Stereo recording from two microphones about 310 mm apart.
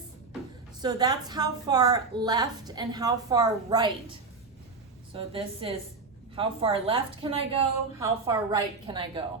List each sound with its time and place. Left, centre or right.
0.8 s a woman's voice: centre
5.1 s a woman's voice: centre